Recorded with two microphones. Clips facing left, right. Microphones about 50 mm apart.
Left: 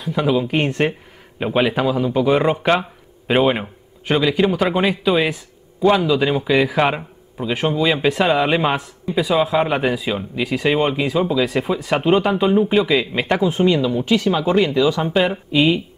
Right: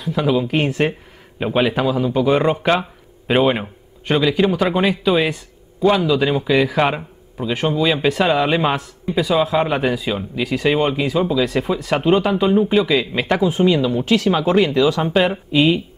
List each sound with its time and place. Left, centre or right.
0.0 s a man's voice: centre
15.2 s a man's voice: centre